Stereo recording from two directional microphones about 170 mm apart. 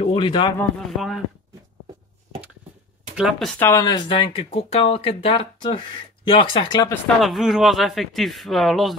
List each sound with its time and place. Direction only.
0.0 s speech: 30° left (ahead or behind)
0.6 s a man's voice: centre (ahead or behind)
3.2 s a man's voice: centre (ahead or behind)
3.5 s speech: 15° left (ahead or behind)
3.8 s speech: 25° left (ahead or behind)
7.2 s a man's voice: centre (ahead or behind)